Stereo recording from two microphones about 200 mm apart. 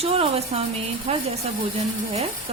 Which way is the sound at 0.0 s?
30° right (ahead or behind).